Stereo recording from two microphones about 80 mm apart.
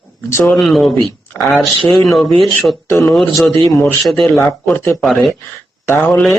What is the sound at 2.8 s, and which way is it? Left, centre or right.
Speech, left.